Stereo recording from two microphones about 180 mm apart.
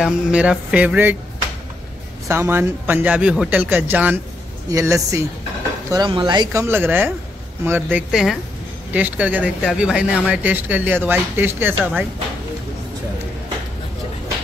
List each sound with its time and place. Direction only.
0.0 s speech: 5° right (ahead or behind)
2.2 s speech: 15° right (ahead or behind)
6.6 s speech: 10° right (ahead or behind)